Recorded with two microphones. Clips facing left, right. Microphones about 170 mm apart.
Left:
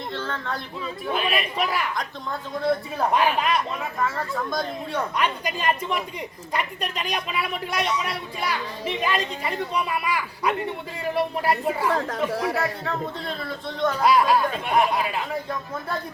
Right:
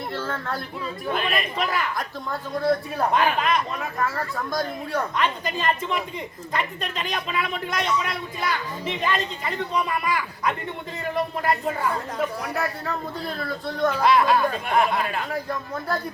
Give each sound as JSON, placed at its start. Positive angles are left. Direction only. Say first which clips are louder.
{"t": 0.1, "sound": "a sound", "louder": "even", "side_deg": -10}
{"t": 1.0, "sound": "a man's voice", "louder": "left 1 dB", "side_deg": 5}
{"t": 3.0, "sound": "a man's voice", "louder": "left 2 dB", "side_deg": 5}
{"t": 5.1, "sound": "a man's voice", "louder": "even", "side_deg": 10}
{"t": 11.9, "sound": "speech", "louder": "left 2 dB", "side_deg": 90}
{"t": 12.8, "sound": "speech", "louder": "left 1 dB", "side_deg": 0}
{"t": 14.0, "sound": "a man's voice", "louder": "even", "side_deg": 10}